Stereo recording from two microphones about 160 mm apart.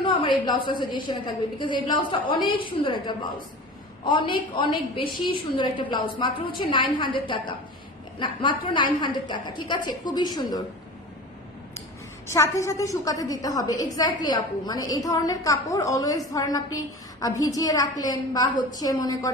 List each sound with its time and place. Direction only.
0.0 s a woman's voice: 30° left (ahead or behind)
12.3 s a woman's voice: 20° left (ahead or behind)